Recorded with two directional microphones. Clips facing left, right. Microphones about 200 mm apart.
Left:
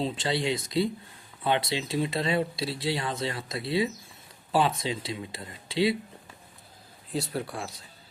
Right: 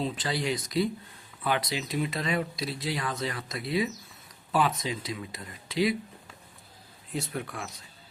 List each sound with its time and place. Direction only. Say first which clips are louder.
0.0 s speech: left 2 dB; 25° left (ahead or behind)
7.1 s speech: left 3 dB; 35° left (ahead or behind)